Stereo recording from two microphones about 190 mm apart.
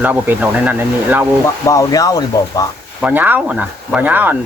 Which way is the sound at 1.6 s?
15° left (ahead or behind).